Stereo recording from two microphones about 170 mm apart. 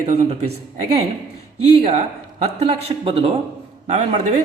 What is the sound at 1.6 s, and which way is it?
A man's voice, 35° right (ahead or behind).